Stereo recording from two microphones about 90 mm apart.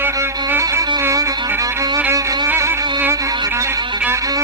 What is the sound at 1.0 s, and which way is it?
Music, 35° right (ahead or behind).